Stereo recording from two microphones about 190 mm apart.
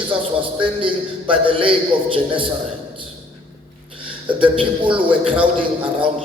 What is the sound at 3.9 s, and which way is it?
Speech, 25° right (ahead or behind).